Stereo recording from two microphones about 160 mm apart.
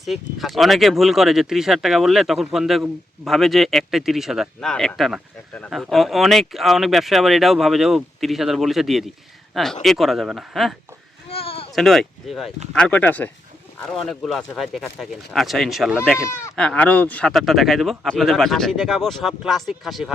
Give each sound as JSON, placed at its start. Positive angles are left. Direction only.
{"t": 0.0, "sound": "speech", "side_deg": 0}
{"t": 11.3, "sound": "bleat", "side_deg": 35}
{"t": 11.7, "sound": "speech", "side_deg": 0}